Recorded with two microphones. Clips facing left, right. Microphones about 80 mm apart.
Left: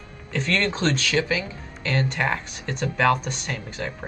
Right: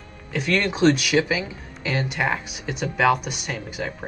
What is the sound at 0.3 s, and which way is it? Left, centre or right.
Speech, centre.